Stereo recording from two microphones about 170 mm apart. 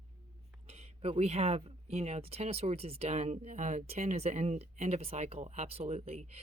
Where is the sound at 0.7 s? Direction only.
35° right (ahead or behind).